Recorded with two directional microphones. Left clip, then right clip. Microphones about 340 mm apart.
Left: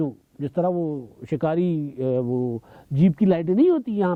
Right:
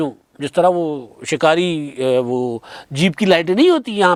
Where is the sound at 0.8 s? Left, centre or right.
Right.